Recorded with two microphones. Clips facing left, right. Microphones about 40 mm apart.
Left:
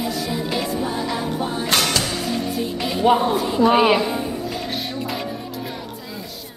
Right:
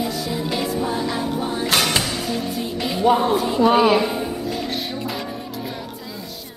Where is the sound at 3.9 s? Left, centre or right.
Centre.